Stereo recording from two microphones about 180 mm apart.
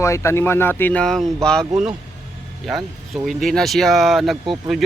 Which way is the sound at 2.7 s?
Centre (ahead or behind).